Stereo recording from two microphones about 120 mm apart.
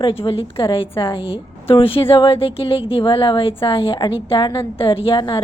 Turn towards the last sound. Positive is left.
turn(degrees=45)  # may be behind; listen again after turning